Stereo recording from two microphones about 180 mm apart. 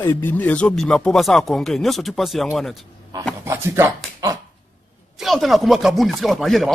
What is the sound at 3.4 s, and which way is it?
Speech, 15° right (ahead or behind).